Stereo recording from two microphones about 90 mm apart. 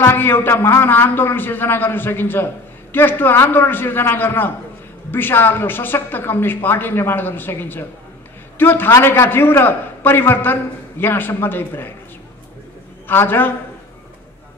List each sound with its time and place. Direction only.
0.0 s a man's voice: 25° left (ahead or behind)
13.1 s a man's voice: 25° left (ahead or behind)